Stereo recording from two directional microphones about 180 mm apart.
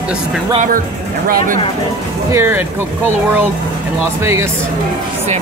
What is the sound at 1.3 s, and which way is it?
Speech, 50° right (ahead or behind).